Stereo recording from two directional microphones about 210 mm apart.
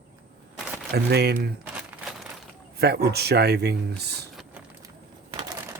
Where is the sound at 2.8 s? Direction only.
50° right (ahead or behind).